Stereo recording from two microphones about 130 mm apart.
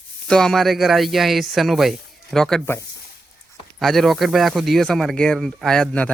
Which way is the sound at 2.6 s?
20° left (ahead or behind).